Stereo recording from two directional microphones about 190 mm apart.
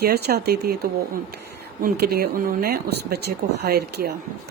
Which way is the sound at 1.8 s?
55° right (ahead or behind).